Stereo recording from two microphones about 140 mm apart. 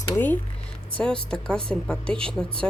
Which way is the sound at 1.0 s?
5° left (ahead or behind).